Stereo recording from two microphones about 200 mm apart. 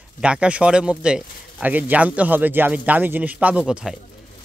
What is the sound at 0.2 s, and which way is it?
A man's voice, 5° right (ahead or behind).